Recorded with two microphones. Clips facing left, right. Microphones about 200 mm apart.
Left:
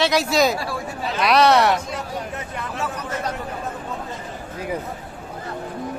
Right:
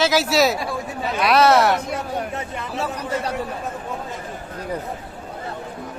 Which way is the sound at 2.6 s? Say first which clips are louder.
Even; 20° right (ahead or behind).